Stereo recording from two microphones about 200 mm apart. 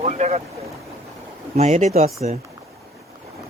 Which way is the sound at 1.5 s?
35° right (ahead or behind).